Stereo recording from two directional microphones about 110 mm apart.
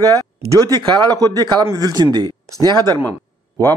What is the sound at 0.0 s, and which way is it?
A man's voice, 35° right (ahead or behind).